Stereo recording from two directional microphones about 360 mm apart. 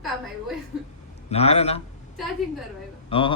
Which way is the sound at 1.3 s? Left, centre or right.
Centre.